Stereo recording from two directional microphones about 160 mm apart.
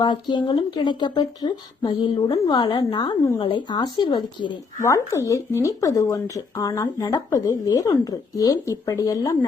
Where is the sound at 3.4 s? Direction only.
30° left (ahead or behind).